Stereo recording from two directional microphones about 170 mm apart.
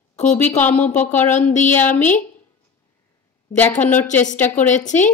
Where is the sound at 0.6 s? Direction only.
10° left (ahead or behind).